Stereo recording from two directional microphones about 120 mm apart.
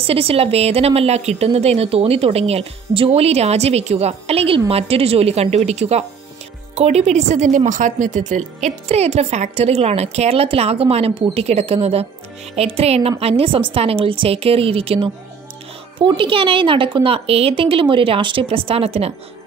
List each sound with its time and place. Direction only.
0.0 s a woman's voice: 55° right (ahead or behind)